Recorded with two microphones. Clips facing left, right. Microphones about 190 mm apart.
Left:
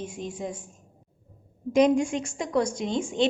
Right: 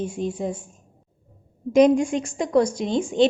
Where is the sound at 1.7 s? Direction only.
40° right (ahead or behind).